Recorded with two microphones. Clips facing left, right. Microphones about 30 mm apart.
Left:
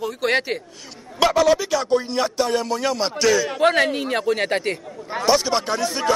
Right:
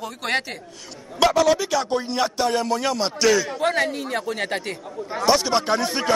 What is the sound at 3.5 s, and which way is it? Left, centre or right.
A man's voice, left.